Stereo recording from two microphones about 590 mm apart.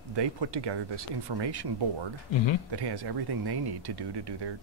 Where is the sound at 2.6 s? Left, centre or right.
Right.